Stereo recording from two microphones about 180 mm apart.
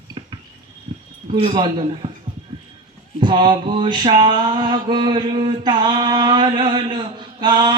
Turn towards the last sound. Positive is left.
turn(degrees=-25)  # may be behind; listen again after turning